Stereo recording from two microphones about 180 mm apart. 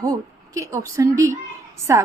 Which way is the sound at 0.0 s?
20° right (ahead or behind).